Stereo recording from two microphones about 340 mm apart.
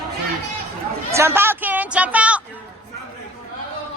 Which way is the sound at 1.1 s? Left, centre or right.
Centre.